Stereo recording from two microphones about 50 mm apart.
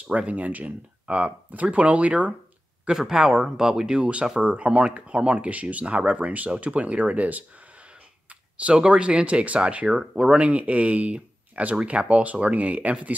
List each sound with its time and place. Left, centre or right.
0.0 s speech: right
2.9 s speech: centre; by 13.1 s right